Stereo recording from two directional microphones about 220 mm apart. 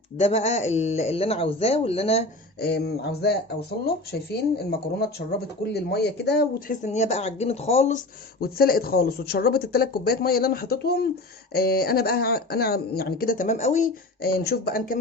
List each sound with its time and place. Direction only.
0.2 s speech: 30° left (ahead or behind)
2.6 s speech: 50° left (ahead or behind); by 8.0 s 30° left (ahead or behind)
8.4 s speech: 45° left (ahead or behind)